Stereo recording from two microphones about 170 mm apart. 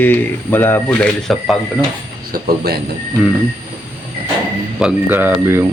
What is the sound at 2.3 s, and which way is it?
Speech, 70° right (ahead or behind).